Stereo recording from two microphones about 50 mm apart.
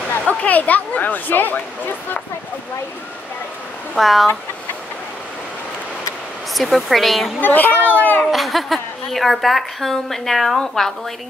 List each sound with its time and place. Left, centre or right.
0.3 s speech: left
3.9 s a woman's voice: centre
6.5 s a woman's voice: centre
7.3 s speech: left
8.3 s a woman's voice: centre